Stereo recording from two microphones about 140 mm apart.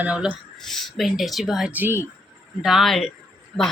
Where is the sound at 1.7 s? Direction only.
15° right (ahead or behind).